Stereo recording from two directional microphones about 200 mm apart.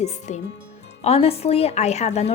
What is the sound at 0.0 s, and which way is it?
A woman's voice, 35° left (ahead or behind).